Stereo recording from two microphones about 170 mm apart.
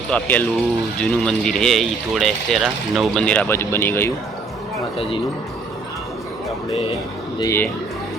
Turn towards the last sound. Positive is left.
turn(degrees=15)  # may be behind; listen again after turning